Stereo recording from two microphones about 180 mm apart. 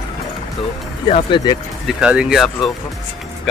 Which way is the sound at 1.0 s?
30° left (ahead or behind).